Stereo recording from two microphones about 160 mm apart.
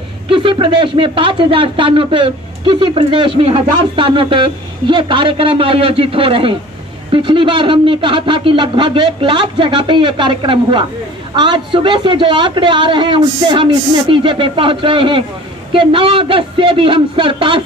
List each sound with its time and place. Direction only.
0.3 s a man's voice: 30° right (ahead or behind)